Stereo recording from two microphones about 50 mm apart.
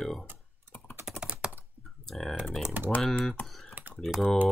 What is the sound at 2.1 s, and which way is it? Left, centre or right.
Speech, centre.